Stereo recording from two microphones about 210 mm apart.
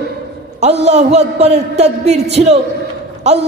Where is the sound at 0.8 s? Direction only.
30° right (ahead or behind).